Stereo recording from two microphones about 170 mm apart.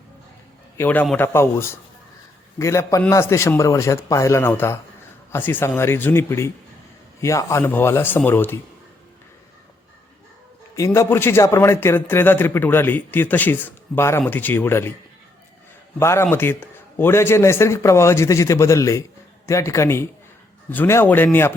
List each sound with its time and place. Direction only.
0.8 s a man's voice: 10° left (ahead or behind)
10.8 s a man's voice: 15° left (ahead or behind)
16.0 s a man's voice: 15° left (ahead or behind)